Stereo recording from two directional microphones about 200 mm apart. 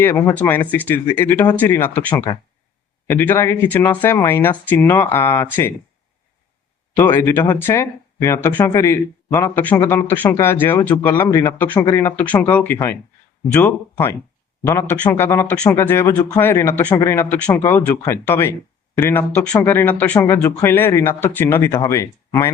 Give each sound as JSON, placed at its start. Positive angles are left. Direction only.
{"t": 0.0, "sound": "speech", "side_deg": 10}
{"t": 6.9, "sound": "speech", "side_deg": 10}